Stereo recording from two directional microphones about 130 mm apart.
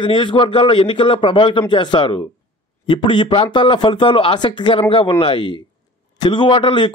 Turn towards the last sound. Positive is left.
turn(degrees=40)  # may be behind; listen again after turning